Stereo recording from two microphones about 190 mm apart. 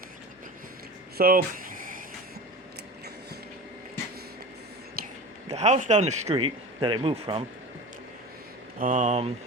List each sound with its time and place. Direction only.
1.2 s a sound: 50° right (ahead or behind)
5.5 s a man's voice: 35° right (ahead or behind)
8.8 s a man's voice: 40° right (ahead or behind)